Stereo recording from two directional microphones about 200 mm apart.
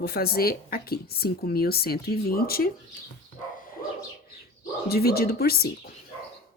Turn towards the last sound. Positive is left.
turn(degrees=50)  # may be behind; listen again after turning